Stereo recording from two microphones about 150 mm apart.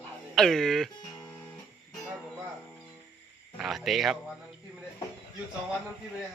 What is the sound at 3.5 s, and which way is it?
Speech, centre (ahead or behind).